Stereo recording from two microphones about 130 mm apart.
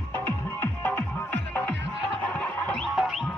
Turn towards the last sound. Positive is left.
turn(degrees=0)  # may be behind; listen again after turning